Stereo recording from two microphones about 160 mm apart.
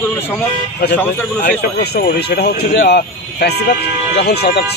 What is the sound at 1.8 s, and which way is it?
Speech, 75° left (ahead or behind).